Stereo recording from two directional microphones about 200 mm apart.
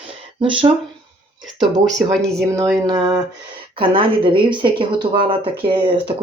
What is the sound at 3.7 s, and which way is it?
Speech, 25° right (ahead or behind).